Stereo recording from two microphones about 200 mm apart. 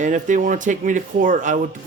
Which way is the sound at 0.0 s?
40° right (ahead or behind).